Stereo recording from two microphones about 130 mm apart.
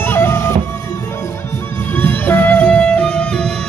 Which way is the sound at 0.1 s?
15° left (ahead or behind).